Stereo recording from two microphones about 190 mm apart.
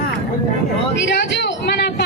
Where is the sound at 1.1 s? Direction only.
65° left (ahead or behind).